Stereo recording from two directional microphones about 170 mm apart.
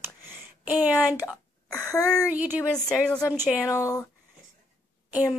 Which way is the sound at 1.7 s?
20° left (ahead or behind).